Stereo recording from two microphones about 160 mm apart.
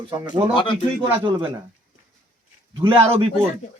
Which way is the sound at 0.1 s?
25° right (ahead or behind).